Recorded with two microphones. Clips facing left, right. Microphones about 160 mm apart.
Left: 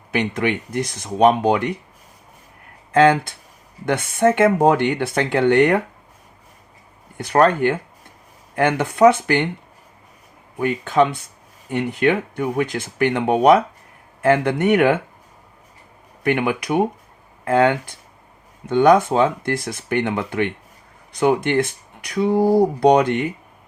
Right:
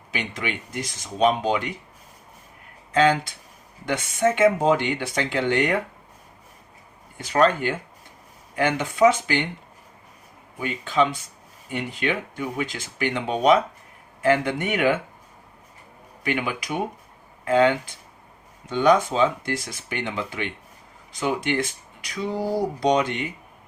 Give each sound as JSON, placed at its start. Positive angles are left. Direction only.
{"t": 0.1, "sound": "speech", "side_deg": 60}
{"t": 2.9, "sound": "speech", "side_deg": 60}
{"t": 7.2, "sound": "speech", "side_deg": 60}
{"t": 10.6, "sound": "speech", "side_deg": 55}
{"t": 16.2, "sound": "speech", "side_deg": 60}